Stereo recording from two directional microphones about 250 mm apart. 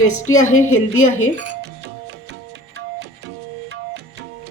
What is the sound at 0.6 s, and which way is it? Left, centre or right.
Speech, left.